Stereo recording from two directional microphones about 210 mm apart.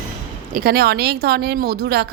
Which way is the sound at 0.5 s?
45° right (ahead or behind).